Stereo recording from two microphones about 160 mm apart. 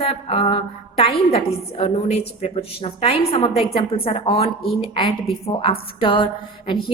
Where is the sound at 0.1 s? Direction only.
40° left (ahead or behind).